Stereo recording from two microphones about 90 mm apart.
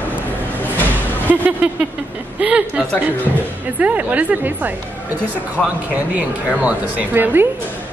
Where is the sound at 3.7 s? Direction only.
15° right (ahead or behind).